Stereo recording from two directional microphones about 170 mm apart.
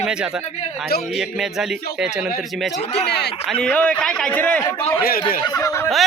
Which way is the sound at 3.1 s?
80° left.